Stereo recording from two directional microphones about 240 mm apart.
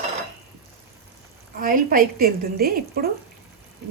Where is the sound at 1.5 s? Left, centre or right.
Right.